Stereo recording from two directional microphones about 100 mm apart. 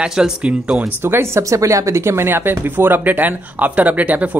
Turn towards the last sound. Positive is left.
turn(degrees=-15)  # may be behind; listen again after turning